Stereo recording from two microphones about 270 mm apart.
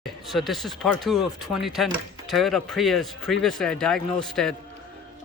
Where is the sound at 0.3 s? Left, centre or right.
Centre.